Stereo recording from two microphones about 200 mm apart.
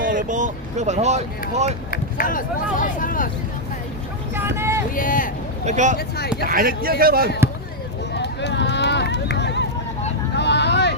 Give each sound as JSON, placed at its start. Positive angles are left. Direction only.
{"t": 0.0, "sound": "speech", "side_deg": -40}
{"t": 1.9, "sound": "speech", "side_deg": 45}
{"t": 4.4, "sound": "vehicle", "side_deg": -10}
{"t": 4.9, "sound": "speech", "side_deg": 45}
{"t": 5.6, "sound": "speech", "side_deg": -35}
{"t": 6.0, "sound": "speech", "side_deg": 55}
{"t": 6.4, "sound": "a man's voice", "side_deg": -45}
{"t": 8.1, "sound": "run", "side_deg": 60}
{"t": 10.3, "sound": "vehicle", "side_deg": 60}